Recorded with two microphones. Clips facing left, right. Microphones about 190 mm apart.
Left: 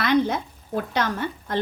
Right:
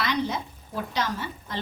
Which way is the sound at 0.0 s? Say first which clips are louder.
Left 7 dB; 55° left (ahead or behind).